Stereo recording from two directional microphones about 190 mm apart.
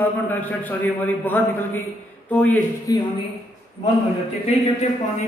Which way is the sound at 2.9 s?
20° left (ahead or behind).